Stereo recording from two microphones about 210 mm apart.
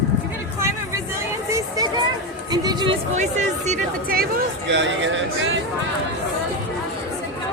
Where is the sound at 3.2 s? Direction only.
35° right (ahead or behind).